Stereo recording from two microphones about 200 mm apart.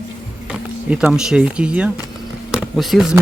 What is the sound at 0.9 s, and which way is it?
Speech, 5° right (ahead or behind).